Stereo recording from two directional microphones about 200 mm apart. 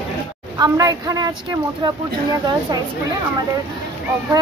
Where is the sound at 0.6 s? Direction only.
15° right (ahead or behind).